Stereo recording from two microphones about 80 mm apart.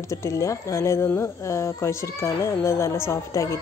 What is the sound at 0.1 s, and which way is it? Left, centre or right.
Speech, left.